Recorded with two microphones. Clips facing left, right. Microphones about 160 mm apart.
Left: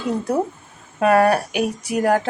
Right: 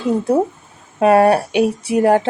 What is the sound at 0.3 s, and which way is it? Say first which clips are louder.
Speech: right 5 dB; 25° right (ahead or behind).